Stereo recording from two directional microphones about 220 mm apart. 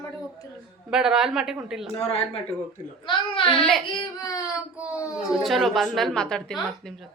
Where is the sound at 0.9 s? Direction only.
5° right (ahead or behind).